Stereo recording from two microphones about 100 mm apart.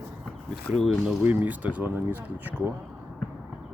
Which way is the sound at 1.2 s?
15° right (ahead or behind).